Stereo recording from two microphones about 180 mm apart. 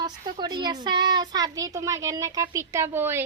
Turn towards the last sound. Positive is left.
turn(degrees=-15)  # may be behind; listen again after turning